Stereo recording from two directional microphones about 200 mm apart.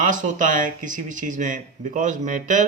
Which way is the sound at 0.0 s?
40° right (ahead or behind).